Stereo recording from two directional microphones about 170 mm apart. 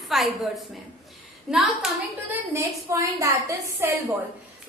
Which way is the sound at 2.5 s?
15° right (ahead or behind).